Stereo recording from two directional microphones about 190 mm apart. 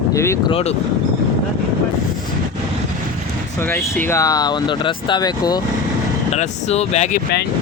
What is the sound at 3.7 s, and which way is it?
Speech, 10° left (ahead or behind).